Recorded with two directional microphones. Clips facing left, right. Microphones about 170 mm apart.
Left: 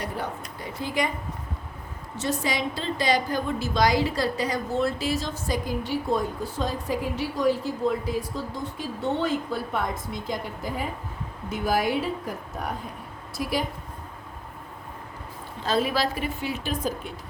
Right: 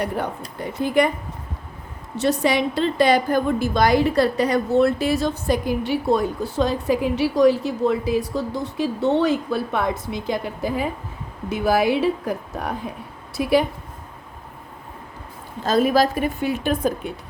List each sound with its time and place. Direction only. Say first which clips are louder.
0.0 s a woman's voice: right 6 dB; 60° right (ahead or behind)
2.1 s a woman's voice: right 8 dB; 70° right (ahead or behind)
13.3 s a woman's voice: right 9 dB; 65° right (ahead or behind)
15.6 s a woman's voice: right 7 dB; 45° right (ahead or behind)